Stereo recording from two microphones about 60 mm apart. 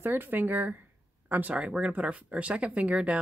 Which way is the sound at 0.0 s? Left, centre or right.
Right.